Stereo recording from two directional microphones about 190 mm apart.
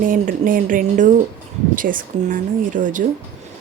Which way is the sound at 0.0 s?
45° right (ahead or behind).